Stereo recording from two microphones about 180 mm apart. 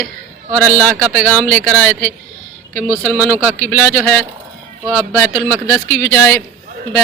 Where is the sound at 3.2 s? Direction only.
10° left (ahead or behind).